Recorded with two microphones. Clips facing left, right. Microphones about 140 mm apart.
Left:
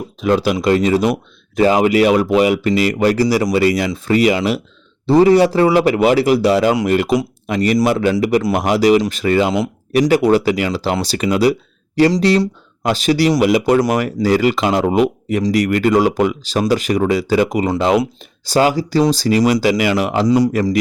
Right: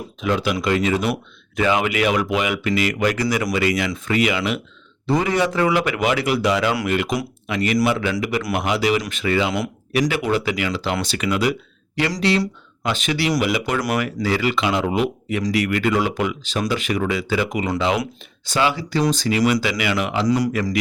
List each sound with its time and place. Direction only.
0.2 s speech: 35° left (ahead or behind)
20.2 s speech: 25° left (ahead or behind)